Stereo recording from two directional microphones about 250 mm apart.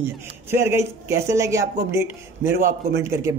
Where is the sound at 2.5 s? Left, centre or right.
Right.